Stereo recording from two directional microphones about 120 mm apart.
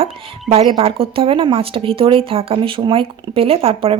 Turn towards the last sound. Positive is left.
turn(degrees=-50)  # may be behind; listen again after turning